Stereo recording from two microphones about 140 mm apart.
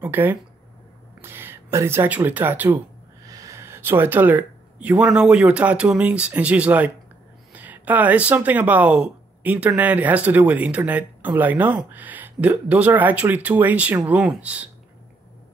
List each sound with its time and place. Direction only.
0.0 s speech: 15° right (ahead or behind)